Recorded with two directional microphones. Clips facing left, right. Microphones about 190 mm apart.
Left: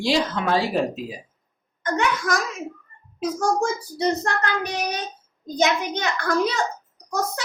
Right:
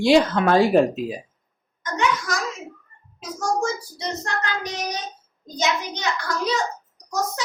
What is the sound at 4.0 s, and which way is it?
A child's voice, 60° left (ahead or behind).